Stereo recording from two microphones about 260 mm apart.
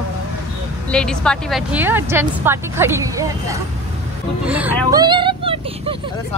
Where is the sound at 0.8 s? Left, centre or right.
Centre; by 5.9 s right.